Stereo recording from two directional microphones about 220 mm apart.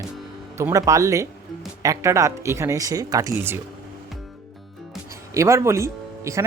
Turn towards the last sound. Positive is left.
turn(degrees=-15)  # may be behind; listen again after turning